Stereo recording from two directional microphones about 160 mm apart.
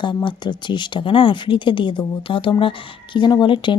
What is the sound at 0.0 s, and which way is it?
Speech, 30° left (ahead or behind).